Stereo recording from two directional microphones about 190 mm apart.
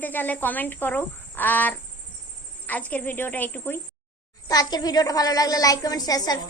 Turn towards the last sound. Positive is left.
turn(degrees=20)  # may be behind; listen again after turning